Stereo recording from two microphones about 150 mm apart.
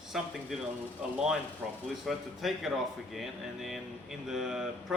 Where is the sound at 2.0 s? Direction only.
Centre (ahead or behind).